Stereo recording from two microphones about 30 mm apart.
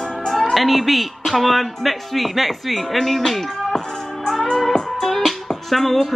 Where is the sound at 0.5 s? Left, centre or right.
Centre.